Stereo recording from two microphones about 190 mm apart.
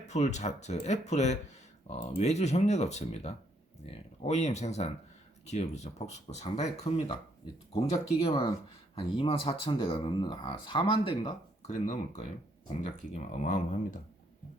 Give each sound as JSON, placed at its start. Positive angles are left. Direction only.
{"t": 0.0, "sound": "speech", "side_deg": 35}
{"t": 9.0, "sound": "speech", "side_deg": 30}